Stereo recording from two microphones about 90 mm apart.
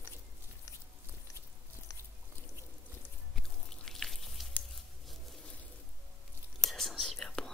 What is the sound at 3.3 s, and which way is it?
Drip, 5° left (ahead or behind).